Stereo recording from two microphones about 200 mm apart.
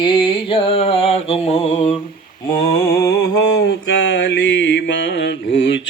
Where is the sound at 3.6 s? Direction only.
55° left (ahead or behind).